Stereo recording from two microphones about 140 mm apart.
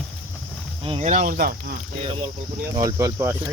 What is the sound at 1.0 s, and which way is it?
Speech, 60° right (ahead or behind).